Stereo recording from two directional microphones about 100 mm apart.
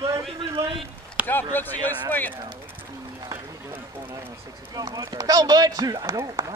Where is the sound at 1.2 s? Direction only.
20° left (ahead or behind).